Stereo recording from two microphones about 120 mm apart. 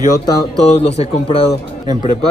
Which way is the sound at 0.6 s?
60° left (ahead or behind).